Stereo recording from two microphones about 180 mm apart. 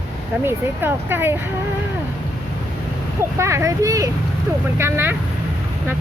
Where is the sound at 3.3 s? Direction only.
15° right (ahead or behind).